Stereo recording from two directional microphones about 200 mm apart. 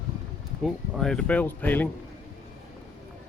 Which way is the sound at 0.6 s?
5° left (ahead or behind).